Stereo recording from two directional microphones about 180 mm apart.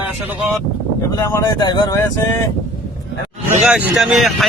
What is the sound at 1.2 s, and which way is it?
Speech, 15° left (ahead or behind).